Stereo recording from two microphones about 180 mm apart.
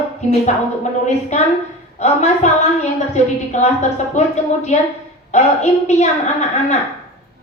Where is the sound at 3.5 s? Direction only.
40° left (ahead or behind).